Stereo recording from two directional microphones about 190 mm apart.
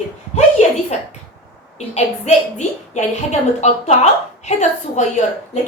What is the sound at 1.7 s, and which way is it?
A woman's voice, 35° left (ahead or behind).